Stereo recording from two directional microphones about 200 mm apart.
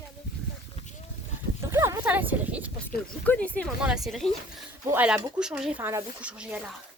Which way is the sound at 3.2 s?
5° left (ahead or behind).